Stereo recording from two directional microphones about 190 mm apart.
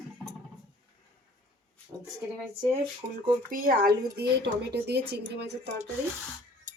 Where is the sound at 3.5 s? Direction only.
50° right (ahead or behind).